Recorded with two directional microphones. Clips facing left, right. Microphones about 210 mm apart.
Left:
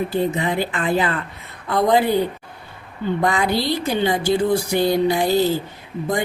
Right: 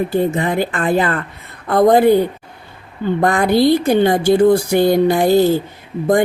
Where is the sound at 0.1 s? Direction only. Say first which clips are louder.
Right 4 dB; 50° right (ahead or behind).